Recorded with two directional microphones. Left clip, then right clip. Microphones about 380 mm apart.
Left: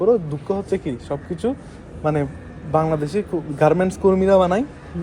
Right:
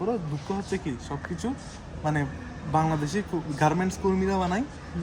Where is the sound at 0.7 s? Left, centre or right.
Centre.